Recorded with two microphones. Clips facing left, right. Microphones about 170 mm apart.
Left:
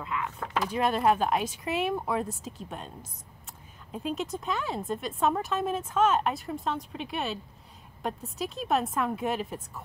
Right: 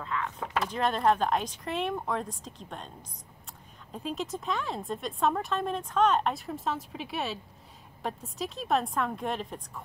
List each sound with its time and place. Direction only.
0.0 s speech: 10° left (ahead or behind)